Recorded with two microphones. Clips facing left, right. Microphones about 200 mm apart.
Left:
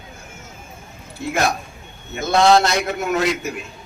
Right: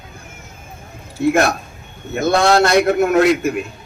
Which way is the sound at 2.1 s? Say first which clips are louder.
Right 1 dB; 55° right (ahead or behind).